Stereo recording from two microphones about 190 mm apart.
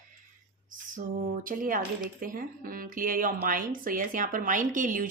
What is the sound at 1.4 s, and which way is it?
Speech, 45° right (ahead or behind).